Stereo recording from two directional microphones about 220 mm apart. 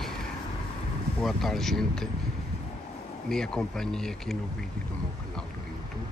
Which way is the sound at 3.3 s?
5° left (ahead or behind).